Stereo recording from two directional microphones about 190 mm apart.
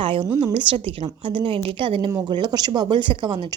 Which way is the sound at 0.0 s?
25° right (ahead or behind).